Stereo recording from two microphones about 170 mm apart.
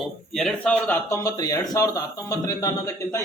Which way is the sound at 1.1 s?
20° left (ahead or behind).